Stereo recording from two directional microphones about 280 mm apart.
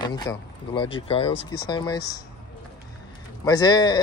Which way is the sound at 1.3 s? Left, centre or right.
Left.